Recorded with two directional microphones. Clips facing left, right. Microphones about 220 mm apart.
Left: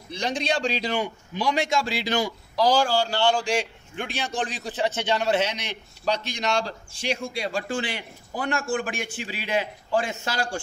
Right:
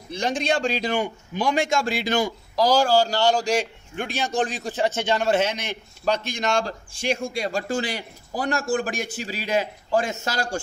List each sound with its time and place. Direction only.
0.1 s a man's voice: 50° right (ahead or behind)